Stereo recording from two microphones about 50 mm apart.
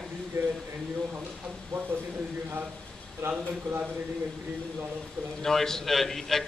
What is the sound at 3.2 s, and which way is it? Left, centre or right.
Speech, right.